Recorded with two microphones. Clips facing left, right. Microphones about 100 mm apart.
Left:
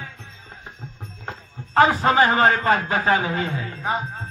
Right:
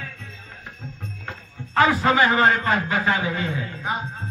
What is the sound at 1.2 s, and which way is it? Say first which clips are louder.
A man's voice: left 1 dB; 35° left (ahead or behind).